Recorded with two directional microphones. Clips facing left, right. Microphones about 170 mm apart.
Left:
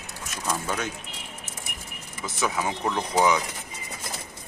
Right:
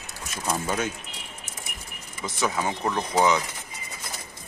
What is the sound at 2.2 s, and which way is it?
Speech, 5° left (ahead or behind).